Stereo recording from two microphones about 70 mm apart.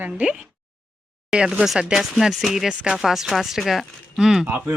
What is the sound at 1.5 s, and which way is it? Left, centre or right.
Speech, centre.